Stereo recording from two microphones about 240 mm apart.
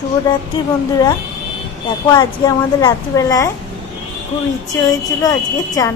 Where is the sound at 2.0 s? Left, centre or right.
Centre.